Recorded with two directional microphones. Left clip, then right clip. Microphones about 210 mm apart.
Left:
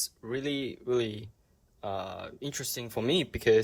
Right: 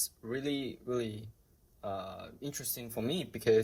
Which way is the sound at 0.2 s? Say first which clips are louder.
Left 3 dB; 30° left (ahead or behind).